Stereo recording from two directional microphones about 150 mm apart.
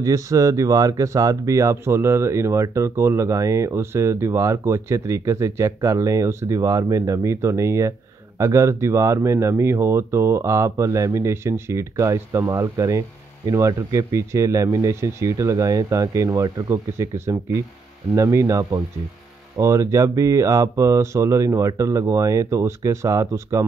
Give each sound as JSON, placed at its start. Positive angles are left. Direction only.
{"t": 0.0, "sound": "speech", "side_deg": -20}